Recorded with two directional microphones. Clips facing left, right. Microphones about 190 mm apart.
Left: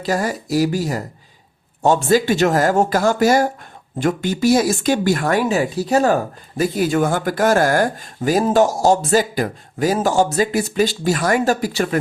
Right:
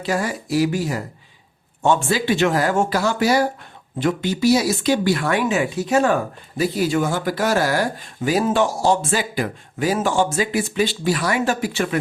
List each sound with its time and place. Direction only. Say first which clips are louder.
0.0 s speech: left 2 dB; 40° left (ahead or behind)
6.6 s speech: left 2 dB; 50° left (ahead or behind)